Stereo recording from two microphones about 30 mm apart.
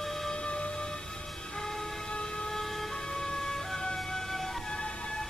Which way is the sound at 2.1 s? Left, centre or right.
Left.